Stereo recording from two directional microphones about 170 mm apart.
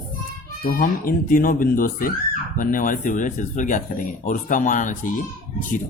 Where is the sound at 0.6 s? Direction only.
55° left (ahead or behind).